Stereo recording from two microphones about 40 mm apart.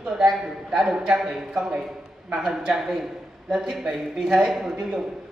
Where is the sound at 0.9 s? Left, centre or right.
Right.